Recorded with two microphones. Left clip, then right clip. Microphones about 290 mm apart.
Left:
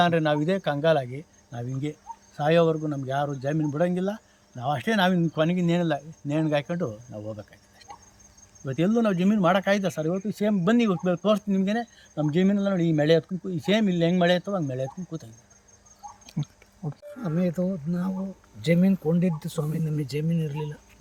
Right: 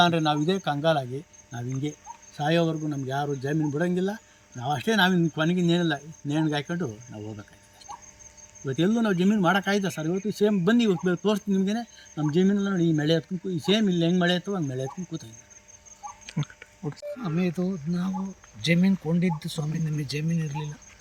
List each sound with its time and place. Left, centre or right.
0.0 s speech: centre
2.3 s speech: centre
8.6 s speech: centre
16.2 s a sound: centre
16.8 s speech: left
17.2 s speech: centre
17.5 s speech: centre
19.2 s speech: centre